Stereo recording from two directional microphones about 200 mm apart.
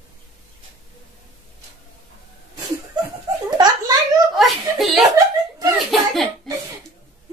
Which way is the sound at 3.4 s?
20° right (ahead or behind).